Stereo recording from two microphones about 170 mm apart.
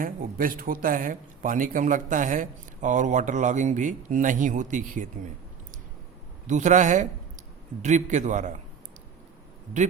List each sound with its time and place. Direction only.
0.0 s speech: 55° right (ahead or behind)
6.5 s speech: 45° right (ahead or behind)